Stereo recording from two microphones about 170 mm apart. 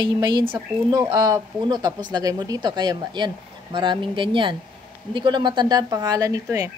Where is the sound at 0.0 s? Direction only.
25° right (ahead or behind).